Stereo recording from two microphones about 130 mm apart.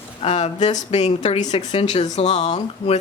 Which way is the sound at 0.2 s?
60° left (ahead or behind).